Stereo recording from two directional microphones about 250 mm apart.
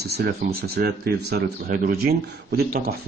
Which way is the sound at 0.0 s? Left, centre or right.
Right.